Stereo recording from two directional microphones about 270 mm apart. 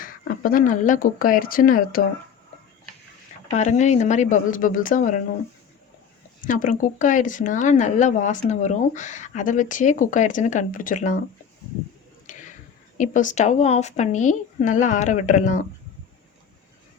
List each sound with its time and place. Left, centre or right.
0.0 s speech: left
3.5 s speech: left
6.4 s speech: left
12.2 s a sound: left
13.0 s speech: left